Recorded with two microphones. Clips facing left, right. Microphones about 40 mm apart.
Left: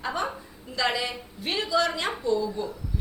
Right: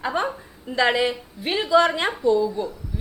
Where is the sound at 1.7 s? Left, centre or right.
Right.